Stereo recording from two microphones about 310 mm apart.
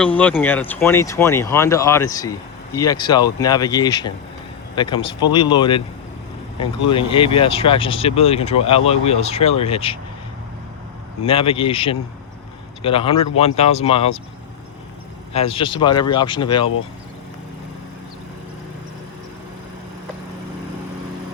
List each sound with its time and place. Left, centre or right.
0.2 s speech: centre
11.2 s speech: centre
15.3 s speech: centre